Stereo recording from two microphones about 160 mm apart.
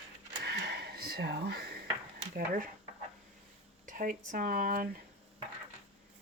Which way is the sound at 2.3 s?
60° right (ahead or behind).